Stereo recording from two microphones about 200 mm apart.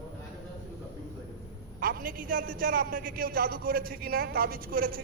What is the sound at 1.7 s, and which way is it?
A man's voice, 45° right (ahead or behind).